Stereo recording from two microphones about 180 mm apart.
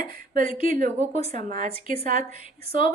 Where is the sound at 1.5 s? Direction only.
50° right (ahead or behind).